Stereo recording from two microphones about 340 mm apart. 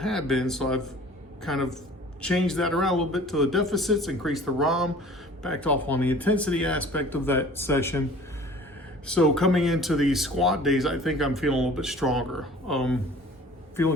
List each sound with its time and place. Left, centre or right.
0.0 s speech: centre
9.0 s speech: centre